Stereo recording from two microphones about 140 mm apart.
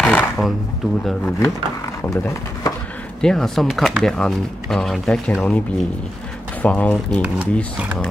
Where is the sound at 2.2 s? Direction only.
20° left (ahead or behind).